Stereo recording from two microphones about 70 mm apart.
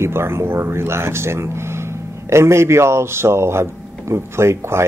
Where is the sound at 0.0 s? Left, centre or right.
Right.